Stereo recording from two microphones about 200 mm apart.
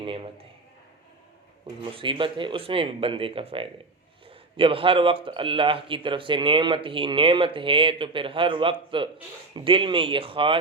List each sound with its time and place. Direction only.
0.0 s a man's voice: 25° right (ahead or behind)
1.6 s speech: 25° right (ahead or behind)